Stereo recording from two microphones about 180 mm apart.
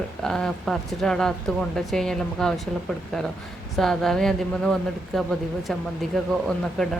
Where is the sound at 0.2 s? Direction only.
5° left (ahead or behind).